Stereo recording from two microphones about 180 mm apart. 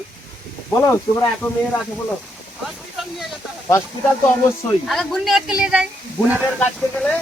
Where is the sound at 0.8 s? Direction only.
15° left (ahead or behind).